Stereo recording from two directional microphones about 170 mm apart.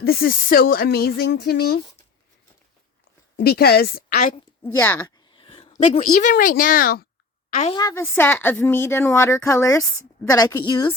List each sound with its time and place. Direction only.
0.0 s speech: 65° left (ahead or behind)
3.3 s speech: 65° left (ahead or behind)
4.6 s a woman's voice: 10° left (ahead or behind)
5.3 s a sound: 30° left (ahead or behind)
6.0 s speech: 50° left (ahead or behind)
7.7 s a woman's voice: 20° left (ahead or behind)